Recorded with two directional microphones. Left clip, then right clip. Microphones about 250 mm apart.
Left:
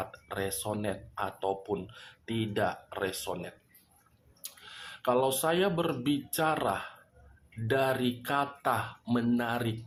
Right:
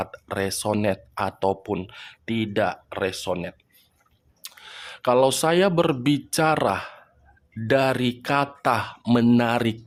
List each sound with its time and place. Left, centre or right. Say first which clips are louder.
0.0 s speech: right 8 dB; right